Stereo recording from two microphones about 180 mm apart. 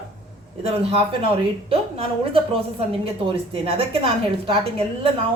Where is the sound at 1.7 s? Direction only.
30° right (ahead or behind).